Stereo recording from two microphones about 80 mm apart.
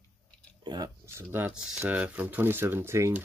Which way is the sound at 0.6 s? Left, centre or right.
Right.